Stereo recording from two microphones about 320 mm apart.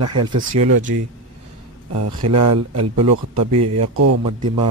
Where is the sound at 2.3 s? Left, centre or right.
Right.